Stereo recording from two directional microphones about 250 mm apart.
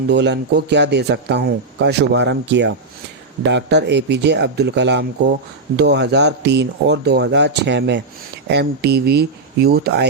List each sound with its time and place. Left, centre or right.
0.1 s speech: right